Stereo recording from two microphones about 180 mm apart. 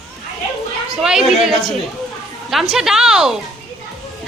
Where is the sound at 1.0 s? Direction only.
5° right (ahead or behind).